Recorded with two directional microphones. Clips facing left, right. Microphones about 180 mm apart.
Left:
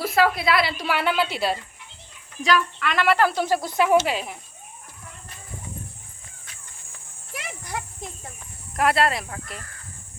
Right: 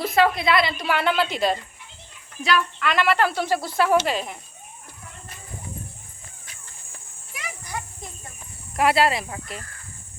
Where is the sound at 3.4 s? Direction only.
15° left (ahead or behind).